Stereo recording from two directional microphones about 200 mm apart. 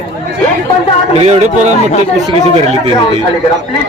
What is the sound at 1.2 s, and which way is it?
Speech, 30° right (ahead or behind).